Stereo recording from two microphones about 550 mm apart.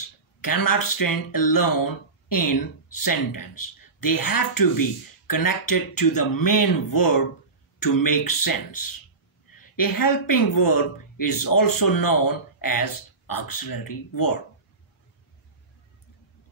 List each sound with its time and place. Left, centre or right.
0.4 s speech: left